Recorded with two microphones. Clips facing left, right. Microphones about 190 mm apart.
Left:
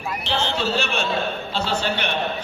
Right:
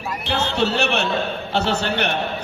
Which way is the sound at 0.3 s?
65° right (ahead or behind).